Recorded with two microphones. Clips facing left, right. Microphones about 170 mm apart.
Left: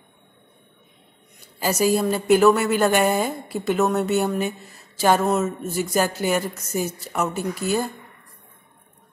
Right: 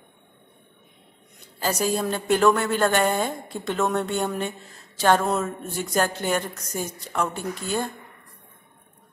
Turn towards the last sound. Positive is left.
turn(degrees=5)  # may be behind; listen again after turning